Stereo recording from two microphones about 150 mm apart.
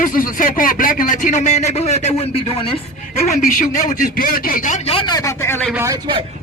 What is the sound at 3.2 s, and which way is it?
Speech, 55° left (ahead or behind).